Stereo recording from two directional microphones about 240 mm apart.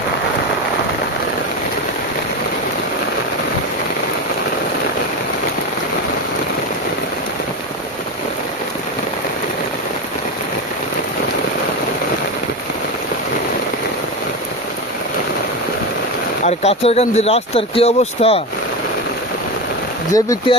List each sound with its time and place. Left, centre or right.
16.4 s speech: left
20.1 s speech: centre